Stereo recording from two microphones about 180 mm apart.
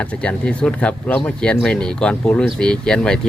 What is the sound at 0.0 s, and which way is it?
Speech, 5° left (ahead or behind).